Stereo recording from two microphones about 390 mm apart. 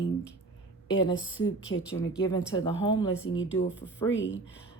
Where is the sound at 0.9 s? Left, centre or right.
Centre.